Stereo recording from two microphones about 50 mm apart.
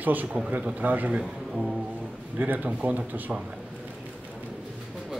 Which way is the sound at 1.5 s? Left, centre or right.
Right.